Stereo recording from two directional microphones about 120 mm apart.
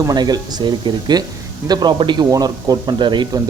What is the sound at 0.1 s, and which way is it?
Speech, 35° right (ahead or behind).